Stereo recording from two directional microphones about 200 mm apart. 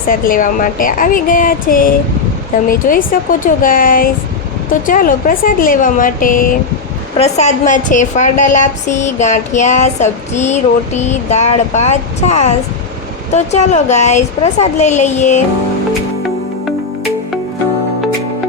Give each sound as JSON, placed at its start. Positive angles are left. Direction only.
{"t": 0.1, "sound": "a woman's voice", "side_deg": 45}